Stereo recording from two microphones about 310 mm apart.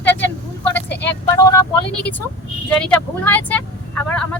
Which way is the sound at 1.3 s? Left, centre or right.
Centre.